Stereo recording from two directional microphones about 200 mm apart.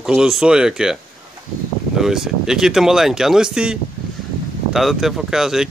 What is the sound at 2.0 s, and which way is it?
Speech, centre (ahead or behind).